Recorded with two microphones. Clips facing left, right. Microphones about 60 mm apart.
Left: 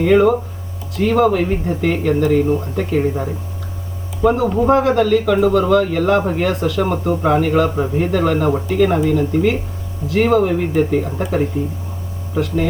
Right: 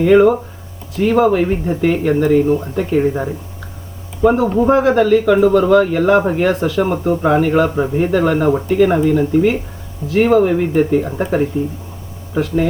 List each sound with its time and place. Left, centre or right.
0.0 s speech: centre
4.3 s speech: centre
12.3 s speech: centre